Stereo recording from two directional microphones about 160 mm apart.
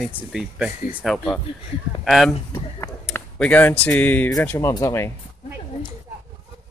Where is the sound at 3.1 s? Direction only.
10° left (ahead or behind).